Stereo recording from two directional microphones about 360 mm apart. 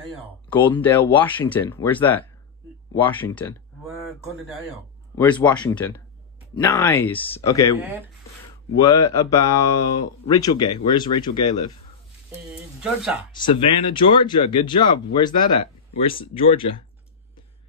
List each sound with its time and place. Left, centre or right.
0.5 s speech: centre
5.1 s speech: centre
12.4 s speech: centre
13.3 s speech: centre